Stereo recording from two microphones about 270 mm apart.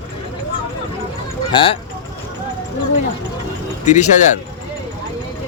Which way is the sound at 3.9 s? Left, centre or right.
Left.